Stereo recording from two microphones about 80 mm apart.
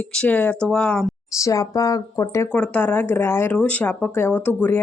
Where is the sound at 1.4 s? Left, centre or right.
Left.